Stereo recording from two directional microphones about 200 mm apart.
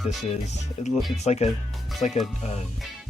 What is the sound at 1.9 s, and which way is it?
Speech, centre (ahead or behind).